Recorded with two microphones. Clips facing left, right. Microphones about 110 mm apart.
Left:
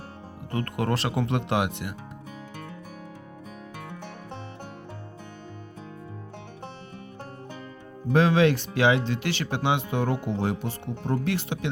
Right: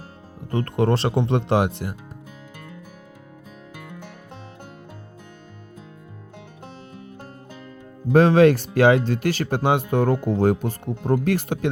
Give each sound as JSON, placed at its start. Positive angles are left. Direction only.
{"t": 0.5, "sound": "speech", "side_deg": -30}
{"t": 8.1, "sound": "speech", "side_deg": -45}